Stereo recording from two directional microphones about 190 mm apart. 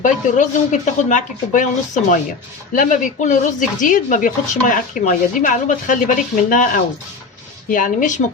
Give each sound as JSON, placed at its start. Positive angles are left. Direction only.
{"t": 0.0, "sound": "speech", "side_deg": 40}
{"t": 2.7, "sound": "speech", "side_deg": 45}